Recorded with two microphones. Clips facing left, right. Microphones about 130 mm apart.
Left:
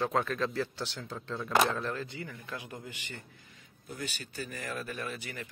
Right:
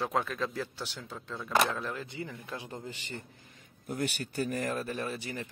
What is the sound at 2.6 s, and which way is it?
Speech, 35° right (ahead or behind).